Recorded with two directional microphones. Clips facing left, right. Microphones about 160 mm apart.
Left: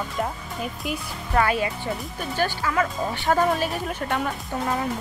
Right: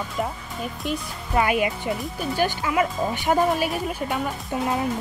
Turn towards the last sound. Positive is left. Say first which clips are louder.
# right 1 dB
turn(degrees=-15)  # may be behind; listen again after turning